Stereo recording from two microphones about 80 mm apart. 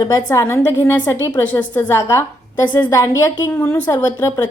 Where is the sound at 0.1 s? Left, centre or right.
Left.